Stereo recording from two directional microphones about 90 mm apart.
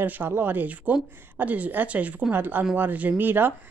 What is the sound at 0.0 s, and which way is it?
Speech, 20° right (ahead or behind).